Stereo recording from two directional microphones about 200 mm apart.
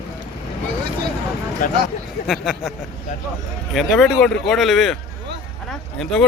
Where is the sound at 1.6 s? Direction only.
45° left (ahead or behind).